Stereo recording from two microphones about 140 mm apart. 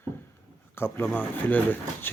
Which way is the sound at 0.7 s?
15° left (ahead or behind).